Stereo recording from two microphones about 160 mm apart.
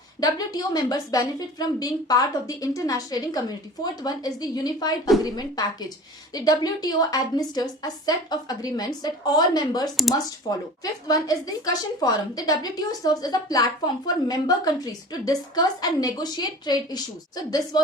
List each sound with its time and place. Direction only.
0.2 s a woman's voice: 25° left (ahead or behind)
11.1 s a woman's voice: 20° left (ahead or behind)